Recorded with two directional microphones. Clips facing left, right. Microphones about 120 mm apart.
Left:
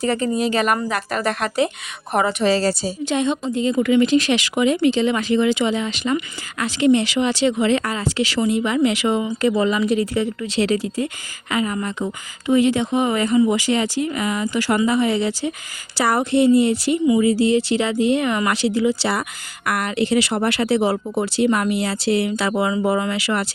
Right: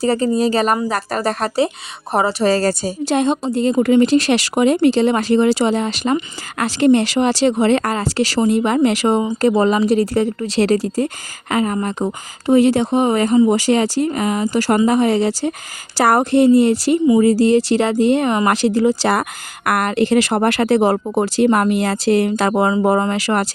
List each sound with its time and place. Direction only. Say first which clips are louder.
0.0 s a woman's voice: right 4 dB; 35° right (ahead or behind)
3.0 s a woman's voice: right 4 dB; 40° right (ahead or behind)